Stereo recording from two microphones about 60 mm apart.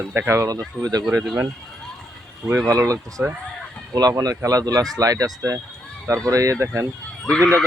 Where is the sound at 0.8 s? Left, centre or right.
Right.